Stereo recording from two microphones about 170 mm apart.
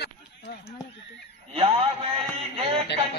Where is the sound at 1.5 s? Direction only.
35° right (ahead or behind).